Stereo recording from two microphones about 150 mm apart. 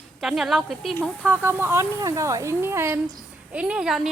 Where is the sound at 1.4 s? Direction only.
15° right (ahead or behind).